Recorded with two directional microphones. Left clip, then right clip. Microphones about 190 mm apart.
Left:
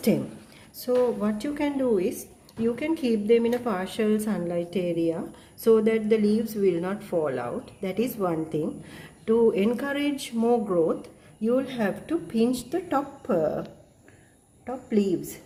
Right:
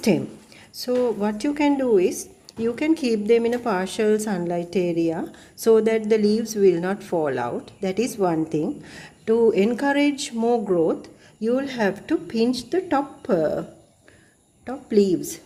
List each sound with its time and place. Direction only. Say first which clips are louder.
0.8 s a woman's voice: right 2 dB; 40° right (ahead or behind)